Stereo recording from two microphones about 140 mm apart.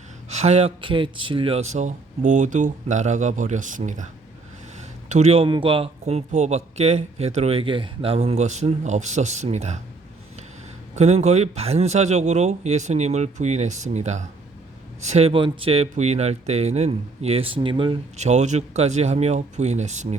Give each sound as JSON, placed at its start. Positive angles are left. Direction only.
{"t": 0.3, "sound": "speech", "side_deg": -50}
{"t": 0.8, "sound": "speech", "side_deg": -35}
{"t": 10.9, "sound": "speech", "side_deg": -50}
{"t": 15.3, "sound": "speech", "side_deg": -35}
{"t": 15.7, "sound": "speech", "side_deg": -50}
{"t": 18.2, "sound": "speech", "side_deg": -55}